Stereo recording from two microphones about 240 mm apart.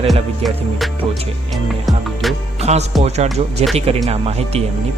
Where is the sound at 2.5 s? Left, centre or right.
Right.